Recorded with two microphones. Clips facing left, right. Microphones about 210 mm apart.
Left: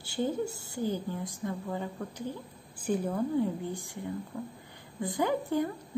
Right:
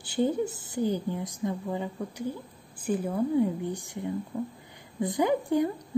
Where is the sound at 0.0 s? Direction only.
15° right (ahead or behind).